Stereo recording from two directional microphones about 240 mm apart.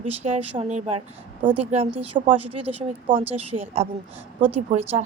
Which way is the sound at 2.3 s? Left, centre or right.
Right.